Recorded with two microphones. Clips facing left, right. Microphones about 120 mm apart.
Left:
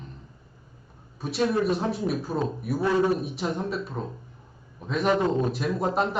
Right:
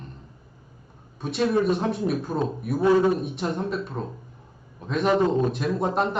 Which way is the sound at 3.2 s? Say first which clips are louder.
Right 1 dB; centre (ahead or behind).